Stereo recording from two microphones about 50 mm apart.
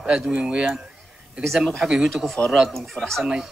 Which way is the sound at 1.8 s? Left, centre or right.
Centre.